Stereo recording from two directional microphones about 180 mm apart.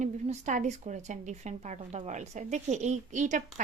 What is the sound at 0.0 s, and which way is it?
A woman's voice, 40° right (ahead or behind).